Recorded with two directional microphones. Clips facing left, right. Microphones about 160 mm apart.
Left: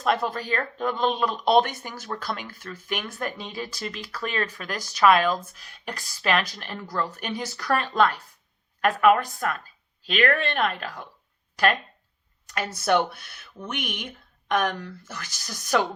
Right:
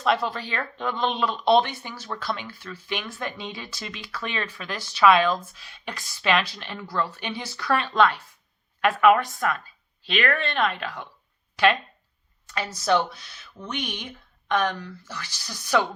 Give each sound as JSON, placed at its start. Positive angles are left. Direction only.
{"t": 0.0, "sound": "speech", "side_deg": 45}
{"t": 12.5, "sound": "speech", "side_deg": 55}